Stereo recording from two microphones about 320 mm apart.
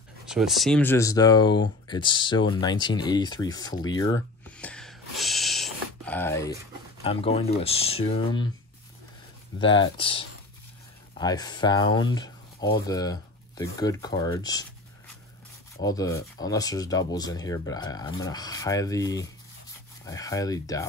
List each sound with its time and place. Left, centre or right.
0.3 s speech: centre
3.5 s a sound: centre
7.0 s speech: centre
9.6 s speech: centre
15.8 s speech: centre